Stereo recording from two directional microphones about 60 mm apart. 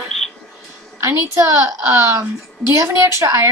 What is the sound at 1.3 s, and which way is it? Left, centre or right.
A woman's voice, right.